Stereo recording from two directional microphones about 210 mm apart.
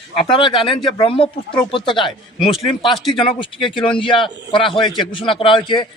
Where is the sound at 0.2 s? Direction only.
25° left (ahead or behind).